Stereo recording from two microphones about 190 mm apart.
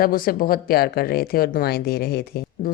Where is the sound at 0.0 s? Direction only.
50° left (ahead or behind).